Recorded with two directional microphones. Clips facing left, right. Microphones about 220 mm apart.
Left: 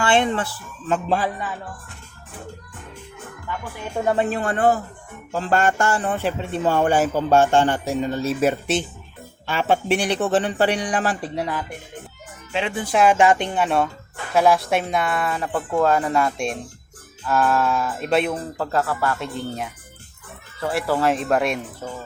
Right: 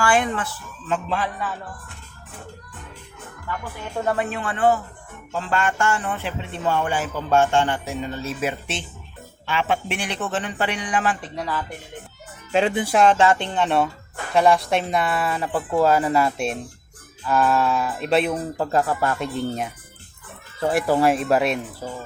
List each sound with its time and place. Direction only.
0.0 s speech: 25° left (ahead or behind)
0.9 s speech: 40° left (ahead or behind)
3.9 s speech: 20° left (ahead or behind)
4.3 s speech: 40° left (ahead or behind)
11.3 s speech: 20° left (ahead or behind)
12.8 s speech: centre (ahead or behind)
13.1 s speech: 15° left (ahead or behind); by 18.3 s centre (ahead or behind)
18.5 s speech: 15° right (ahead or behind)